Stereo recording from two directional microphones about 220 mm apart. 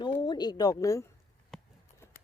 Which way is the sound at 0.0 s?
20° left (ahead or behind).